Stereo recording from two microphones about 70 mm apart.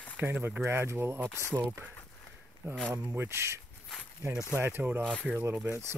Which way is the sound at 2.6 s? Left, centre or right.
Right.